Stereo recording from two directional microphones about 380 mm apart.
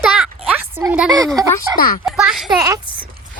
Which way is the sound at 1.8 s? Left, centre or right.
Left.